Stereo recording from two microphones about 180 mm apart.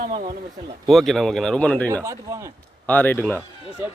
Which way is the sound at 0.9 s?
Centre (ahead or behind).